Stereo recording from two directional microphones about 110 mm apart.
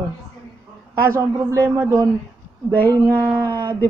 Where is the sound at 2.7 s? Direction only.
15° left (ahead or behind).